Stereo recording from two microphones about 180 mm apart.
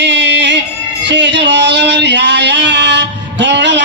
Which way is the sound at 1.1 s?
85° right.